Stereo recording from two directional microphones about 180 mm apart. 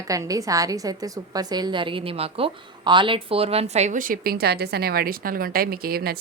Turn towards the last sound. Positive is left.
turn(degrees=-55)  # may be behind; listen again after turning